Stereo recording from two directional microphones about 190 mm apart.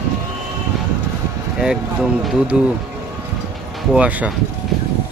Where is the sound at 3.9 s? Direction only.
5° right (ahead or behind).